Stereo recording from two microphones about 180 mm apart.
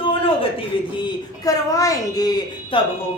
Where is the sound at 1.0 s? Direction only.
20° left (ahead or behind).